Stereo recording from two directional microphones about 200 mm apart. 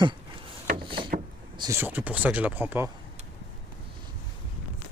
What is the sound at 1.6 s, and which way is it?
Speech, 15° right (ahead or behind).